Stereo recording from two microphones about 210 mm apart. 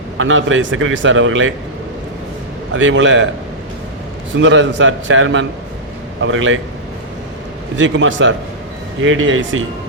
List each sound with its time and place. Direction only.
0.2 s a man's voice: 65° right (ahead or behind)
2.7 s a man's voice: 65° right (ahead or behind)
4.4 s a man's voice: 60° right (ahead or behind)
7.8 s a man's voice: 65° right (ahead or behind)